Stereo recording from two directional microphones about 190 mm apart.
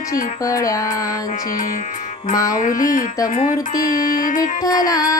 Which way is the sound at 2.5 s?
45° left (ahead or behind).